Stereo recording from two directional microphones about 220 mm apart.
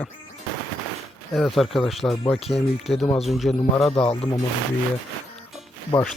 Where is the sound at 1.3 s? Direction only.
Centre (ahead or behind).